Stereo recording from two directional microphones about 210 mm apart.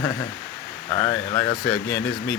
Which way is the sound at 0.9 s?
20° left (ahead or behind).